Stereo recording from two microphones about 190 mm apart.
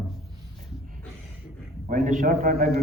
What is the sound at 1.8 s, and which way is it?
Speech, 40° right (ahead or behind).